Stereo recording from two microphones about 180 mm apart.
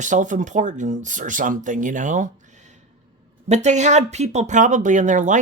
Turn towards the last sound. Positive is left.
turn(degrees=-45)  # may be behind; listen again after turning